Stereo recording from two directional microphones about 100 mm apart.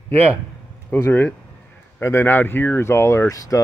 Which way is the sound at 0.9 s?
20° left (ahead or behind).